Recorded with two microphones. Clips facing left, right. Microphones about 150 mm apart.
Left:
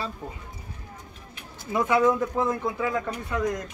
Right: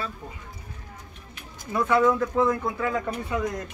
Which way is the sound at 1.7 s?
15° left (ahead or behind).